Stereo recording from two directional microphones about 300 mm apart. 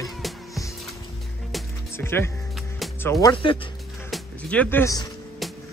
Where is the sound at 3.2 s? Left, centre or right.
Centre.